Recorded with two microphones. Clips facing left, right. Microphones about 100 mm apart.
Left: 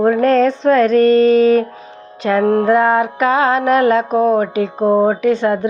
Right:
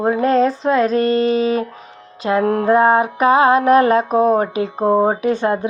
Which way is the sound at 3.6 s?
45° right (ahead or behind).